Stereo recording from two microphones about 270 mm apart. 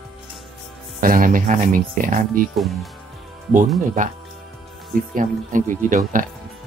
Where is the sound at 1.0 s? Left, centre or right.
Right.